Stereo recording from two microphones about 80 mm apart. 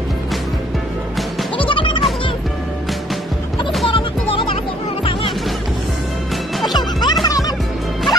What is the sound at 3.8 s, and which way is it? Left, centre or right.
Music, left.